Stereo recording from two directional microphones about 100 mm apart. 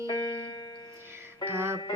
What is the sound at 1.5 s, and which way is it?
Music, 25° right (ahead or behind).